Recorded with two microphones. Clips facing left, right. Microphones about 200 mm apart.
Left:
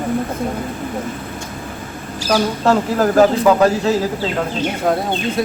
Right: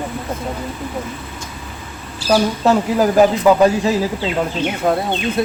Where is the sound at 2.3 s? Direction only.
10° right (ahead or behind).